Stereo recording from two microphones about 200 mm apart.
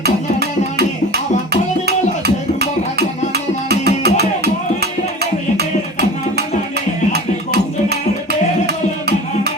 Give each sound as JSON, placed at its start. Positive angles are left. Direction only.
{"t": 0.0, "sound": "music", "side_deg": -55}
{"t": 3.3, "sound": "music", "side_deg": -50}